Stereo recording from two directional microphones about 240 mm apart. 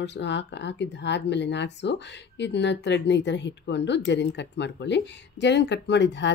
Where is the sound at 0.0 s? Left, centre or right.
Left.